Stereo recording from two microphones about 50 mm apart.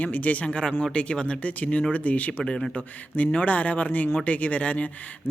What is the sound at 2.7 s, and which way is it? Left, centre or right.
Speech, left.